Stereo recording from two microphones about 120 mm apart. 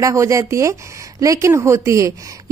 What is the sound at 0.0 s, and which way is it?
A woman's voice, 25° right (ahead or behind).